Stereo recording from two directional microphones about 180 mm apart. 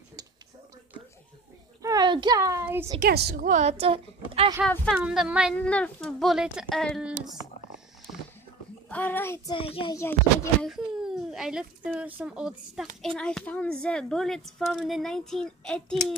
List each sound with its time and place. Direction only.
1.8 s a child's voice: 20° right (ahead or behind)
3.0 s a woman's voice: 65° right (ahead or behind)
3.4 s a woman's voice: 40° right (ahead or behind)
4.9 s a woman's voice: 5° right (ahead or behind)
5.7 s a woman's voice: 5° left (ahead or behind)
8.8 s speech: 10° left (ahead or behind)
9.5 s a child's voice: 30° left (ahead or behind)
9.9 s speech: 15° left (ahead or behind)
10.6 s a child's voice: centre (ahead or behind)